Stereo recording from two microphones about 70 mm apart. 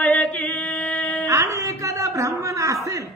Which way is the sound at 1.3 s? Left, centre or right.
Right.